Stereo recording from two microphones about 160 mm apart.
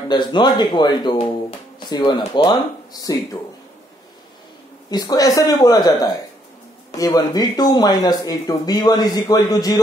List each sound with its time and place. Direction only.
0.1 s speech: 30° left (ahead or behind)
4.8 s speech: 25° left (ahead or behind)